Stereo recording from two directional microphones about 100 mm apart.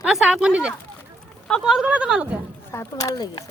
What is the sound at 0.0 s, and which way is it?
Speech, 5° right (ahead or behind).